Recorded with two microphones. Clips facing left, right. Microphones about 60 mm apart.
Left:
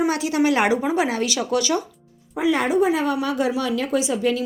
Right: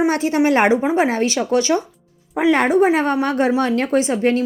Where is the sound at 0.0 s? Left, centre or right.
Right.